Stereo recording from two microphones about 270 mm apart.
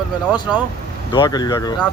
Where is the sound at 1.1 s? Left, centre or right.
Centre.